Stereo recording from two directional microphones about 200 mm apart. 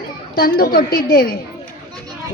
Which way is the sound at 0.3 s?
50° left (ahead or behind).